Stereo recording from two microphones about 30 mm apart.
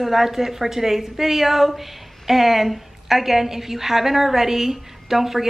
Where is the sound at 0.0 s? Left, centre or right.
Centre.